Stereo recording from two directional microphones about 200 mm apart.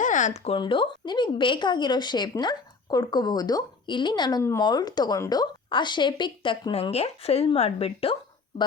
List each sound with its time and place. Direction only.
0.0 s speech: 40° left (ahead or behind)